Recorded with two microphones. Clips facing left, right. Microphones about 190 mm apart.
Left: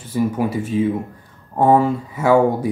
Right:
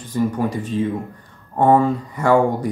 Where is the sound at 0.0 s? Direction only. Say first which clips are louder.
Left 1 dB; 10° left (ahead or behind).